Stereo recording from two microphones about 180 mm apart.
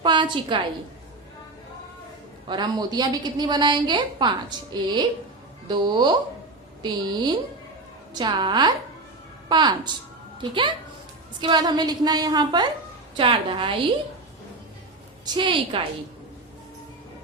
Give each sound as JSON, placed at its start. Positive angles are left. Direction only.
{"t": 0.0, "sound": "a woman's voice", "side_deg": -25}
{"t": 2.5, "sound": "a woman's voice", "side_deg": -25}
{"t": 15.2, "sound": "a woman's voice", "side_deg": -25}